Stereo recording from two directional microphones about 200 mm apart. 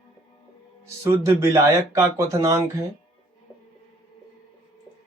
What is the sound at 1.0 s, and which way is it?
Speech, 15° right (ahead or behind).